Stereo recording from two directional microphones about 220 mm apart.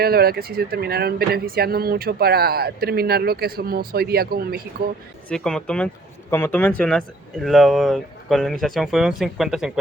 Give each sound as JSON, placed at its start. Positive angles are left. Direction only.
{"t": 0.0, "sound": "speech", "side_deg": -45}
{"t": 5.3, "sound": "speech", "side_deg": 5}